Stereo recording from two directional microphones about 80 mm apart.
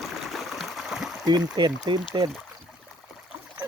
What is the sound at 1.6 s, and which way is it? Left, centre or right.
Speech, right.